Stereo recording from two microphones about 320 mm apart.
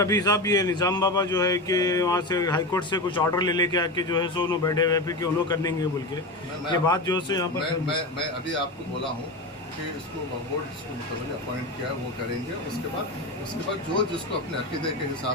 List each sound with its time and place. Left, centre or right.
0.0 s speech: centre